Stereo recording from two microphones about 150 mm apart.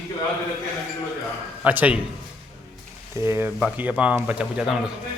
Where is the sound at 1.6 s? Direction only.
10° right (ahead or behind).